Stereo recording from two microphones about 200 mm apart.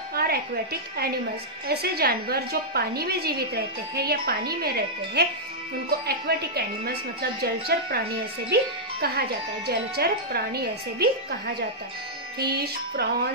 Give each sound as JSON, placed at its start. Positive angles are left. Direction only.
{"t": 0.1, "sound": "music", "side_deg": -50}
{"t": 1.7, "sound": "a woman's voice", "side_deg": -50}
{"t": 9.7, "sound": "a woman's voice", "side_deg": -50}